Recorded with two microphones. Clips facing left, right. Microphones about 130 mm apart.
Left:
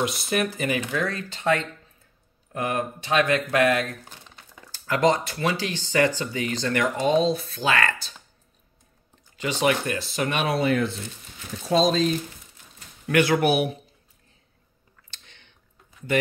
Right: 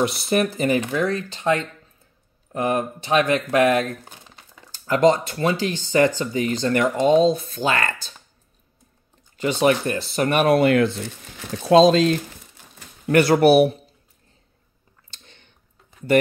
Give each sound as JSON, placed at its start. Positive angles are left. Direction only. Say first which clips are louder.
{"t": 0.0, "sound": "speech", "louder": "right 5 dB", "side_deg": -35}
{"t": 9.4, "sound": "speech", "louder": "right 4 dB", "side_deg": -35}
{"t": 11.3, "sound": "speech", "louder": "right 8 dB", "side_deg": -85}
{"t": 13.1, "sound": "speech", "louder": "right 6 dB", "side_deg": -40}
{"t": 15.2, "sound": "a sound", "louder": "right 3 dB", "side_deg": -40}